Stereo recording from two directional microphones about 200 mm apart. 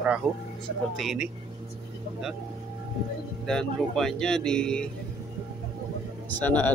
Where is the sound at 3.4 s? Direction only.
Centre (ahead or behind).